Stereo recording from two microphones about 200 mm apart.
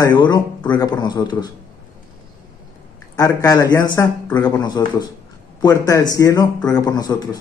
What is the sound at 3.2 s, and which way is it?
A man's voice, 20° left (ahead or behind).